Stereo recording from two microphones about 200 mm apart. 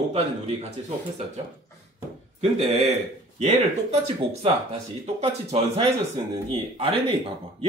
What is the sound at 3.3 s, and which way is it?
Speech, 30° right (ahead or behind).